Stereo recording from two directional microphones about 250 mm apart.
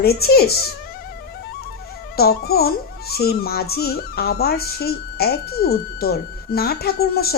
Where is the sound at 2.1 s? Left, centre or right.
Left.